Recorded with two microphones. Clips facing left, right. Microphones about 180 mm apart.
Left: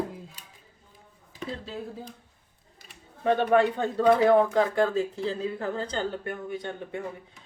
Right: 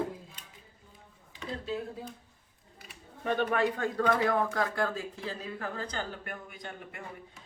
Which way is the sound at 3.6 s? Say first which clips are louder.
Left 5 dB; 25° left (ahead or behind).